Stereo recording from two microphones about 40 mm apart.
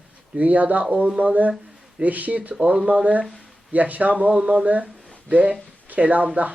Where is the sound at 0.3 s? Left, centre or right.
Right.